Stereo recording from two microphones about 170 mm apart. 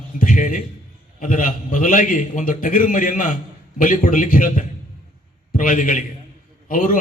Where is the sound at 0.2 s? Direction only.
55° left (ahead or behind).